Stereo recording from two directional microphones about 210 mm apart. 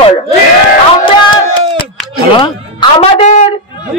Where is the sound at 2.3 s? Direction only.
20° left (ahead or behind).